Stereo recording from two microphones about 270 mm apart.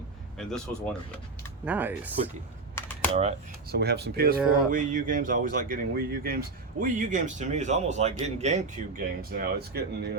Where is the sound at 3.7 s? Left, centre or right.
Right.